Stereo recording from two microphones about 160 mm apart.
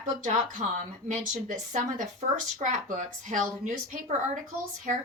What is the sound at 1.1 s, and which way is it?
Speech, 50° right (ahead or behind).